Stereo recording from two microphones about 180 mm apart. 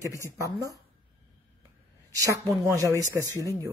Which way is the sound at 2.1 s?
15° right (ahead or behind).